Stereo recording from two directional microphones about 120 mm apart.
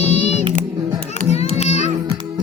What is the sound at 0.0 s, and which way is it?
Music, 65° left (ahead or behind).